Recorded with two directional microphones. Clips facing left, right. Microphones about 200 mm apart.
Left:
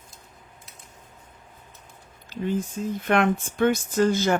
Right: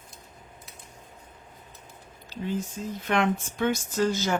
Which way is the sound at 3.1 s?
55° left (ahead or behind).